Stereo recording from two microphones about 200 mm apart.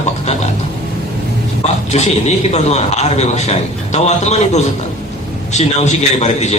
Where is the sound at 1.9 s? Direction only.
35° left (ahead or behind).